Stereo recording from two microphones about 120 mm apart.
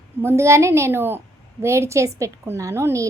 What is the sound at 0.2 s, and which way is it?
A woman's voice, 20° right (ahead or behind).